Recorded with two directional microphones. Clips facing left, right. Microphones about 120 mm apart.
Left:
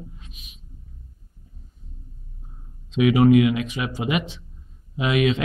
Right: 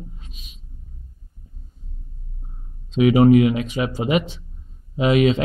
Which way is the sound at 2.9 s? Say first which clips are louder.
Right 3 dB; 35° right (ahead or behind).